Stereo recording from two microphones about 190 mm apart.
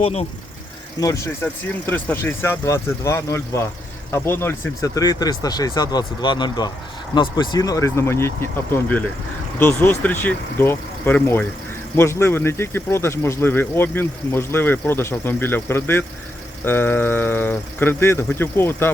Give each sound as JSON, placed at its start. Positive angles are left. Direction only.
{"t": 0.0, "sound": "speech", "side_deg": 35}
{"t": 0.9, "sound": "speech", "side_deg": 15}